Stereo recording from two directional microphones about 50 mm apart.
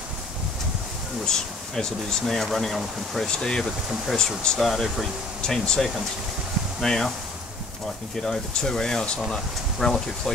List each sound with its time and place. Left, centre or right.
1.2 s speech: centre
3.3 s speech: centre
4.5 s speech: centre
8.2 s speech: centre